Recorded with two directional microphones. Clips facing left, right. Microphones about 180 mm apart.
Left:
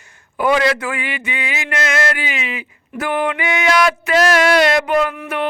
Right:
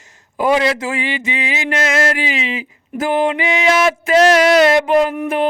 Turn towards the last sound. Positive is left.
turn(degrees=-30)  # may be behind; listen again after turning